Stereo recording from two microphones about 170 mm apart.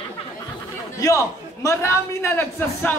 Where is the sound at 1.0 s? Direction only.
20° left (ahead or behind).